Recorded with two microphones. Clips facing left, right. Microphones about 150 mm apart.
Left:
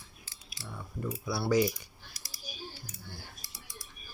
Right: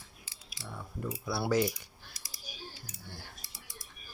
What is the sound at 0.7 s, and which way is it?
Cutlery, centre (ahead or behind).